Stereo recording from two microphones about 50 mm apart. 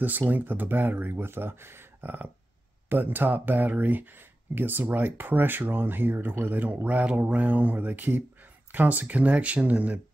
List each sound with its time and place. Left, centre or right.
0.0 s speech: right
6.5 s speech: right